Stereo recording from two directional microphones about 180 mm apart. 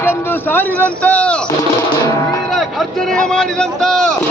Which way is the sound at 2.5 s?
5° left (ahead or behind).